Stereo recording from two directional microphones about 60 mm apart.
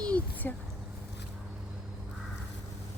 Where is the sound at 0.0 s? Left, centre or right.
Left.